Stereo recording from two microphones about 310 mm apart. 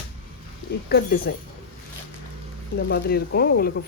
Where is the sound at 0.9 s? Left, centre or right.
Left.